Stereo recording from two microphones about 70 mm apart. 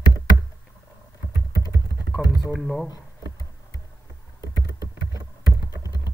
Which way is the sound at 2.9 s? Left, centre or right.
Left.